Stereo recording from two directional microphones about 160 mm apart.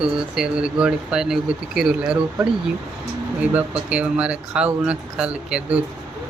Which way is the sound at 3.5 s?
5° right (ahead or behind).